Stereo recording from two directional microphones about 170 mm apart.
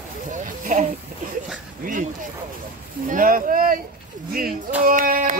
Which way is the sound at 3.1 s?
55° right (ahead or behind).